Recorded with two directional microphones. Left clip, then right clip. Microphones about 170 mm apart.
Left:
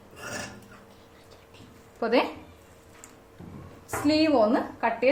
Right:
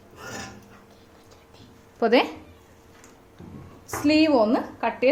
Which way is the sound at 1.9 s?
55° right (ahead or behind).